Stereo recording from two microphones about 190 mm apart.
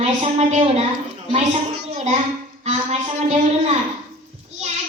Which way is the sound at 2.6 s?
35° right (ahead or behind).